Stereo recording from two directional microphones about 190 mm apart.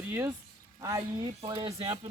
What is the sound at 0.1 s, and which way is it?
Speech, 15° right (ahead or behind).